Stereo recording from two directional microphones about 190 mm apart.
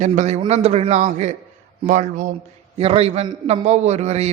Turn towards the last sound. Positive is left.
turn(degrees=-35)  # may be behind; listen again after turning